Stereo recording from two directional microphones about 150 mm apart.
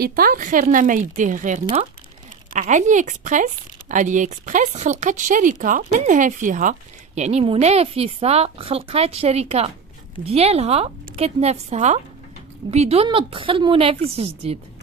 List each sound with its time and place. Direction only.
0.0 s a woman's voice: 75° right (ahead or behind); by 14.6 s 40° right (ahead or behind)